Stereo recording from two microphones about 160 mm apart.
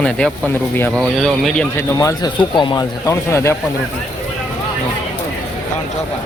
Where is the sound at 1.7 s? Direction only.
20° left (ahead or behind).